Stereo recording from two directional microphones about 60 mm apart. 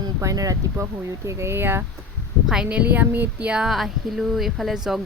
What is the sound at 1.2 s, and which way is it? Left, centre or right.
Speech, right.